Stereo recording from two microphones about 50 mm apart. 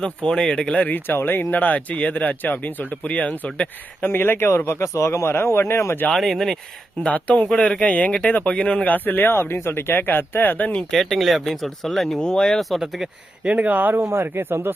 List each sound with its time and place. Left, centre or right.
0.0 s speech: centre
0.8 s speech: left
4.0 s speech: left
6.1 s speech: centre
7.0 s speech: left
7.5 s speech: centre
8.9 s speech: left
10.8 s speech: centre
13.6 s speech: right
14.3 s speech: right